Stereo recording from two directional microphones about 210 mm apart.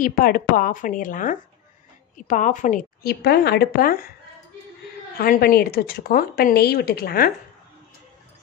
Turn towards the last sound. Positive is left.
turn(degrees=45)  # may be behind; listen again after turning